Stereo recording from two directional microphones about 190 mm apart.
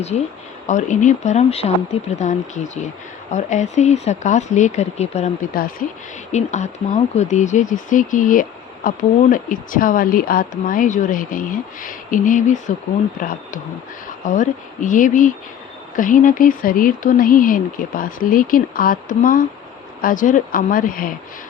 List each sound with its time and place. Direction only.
0.7 s speech: 40° left (ahead or behind)
3.3 s speech: 40° left (ahead or behind)
6.3 s speech: 35° left (ahead or behind)
14.3 s speech: 40° left (ahead or behind)